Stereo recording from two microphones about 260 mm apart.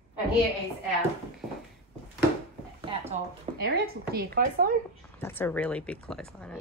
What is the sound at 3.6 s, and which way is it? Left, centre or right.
Speech, right.